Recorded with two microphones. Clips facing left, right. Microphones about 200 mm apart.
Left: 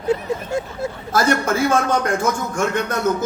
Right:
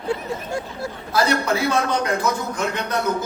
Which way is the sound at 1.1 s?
45° left (ahead or behind).